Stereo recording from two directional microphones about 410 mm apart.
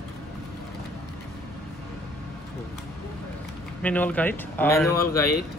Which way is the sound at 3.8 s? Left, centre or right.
Centre.